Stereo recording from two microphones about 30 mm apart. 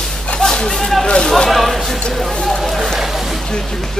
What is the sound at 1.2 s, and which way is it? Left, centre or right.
Speech, centre.